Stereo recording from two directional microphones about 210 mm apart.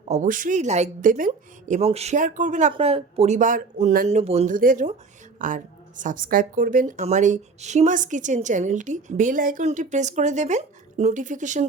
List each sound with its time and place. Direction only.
0.1 s speech: 40° right (ahead or behind)